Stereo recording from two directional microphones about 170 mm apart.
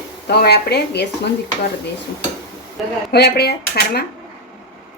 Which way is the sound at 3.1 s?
70° left (ahead or behind).